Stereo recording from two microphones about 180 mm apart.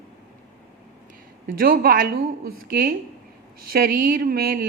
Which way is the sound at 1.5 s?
55° right (ahead or behind).